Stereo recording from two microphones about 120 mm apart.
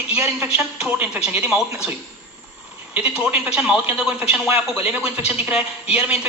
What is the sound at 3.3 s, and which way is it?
A woman's voice, 10° right (ahead or behind).